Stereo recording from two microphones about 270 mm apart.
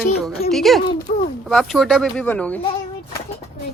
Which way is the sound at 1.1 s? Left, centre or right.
Left.